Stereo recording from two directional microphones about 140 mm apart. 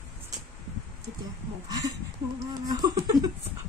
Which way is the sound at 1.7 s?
25° right (ahead or behind).